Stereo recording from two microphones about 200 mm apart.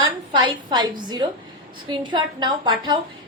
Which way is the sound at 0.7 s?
20° right (ahead or behind).